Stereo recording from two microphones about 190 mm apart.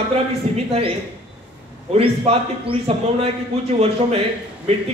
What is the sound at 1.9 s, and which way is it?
A man's voice, 30° right (ahead or behind).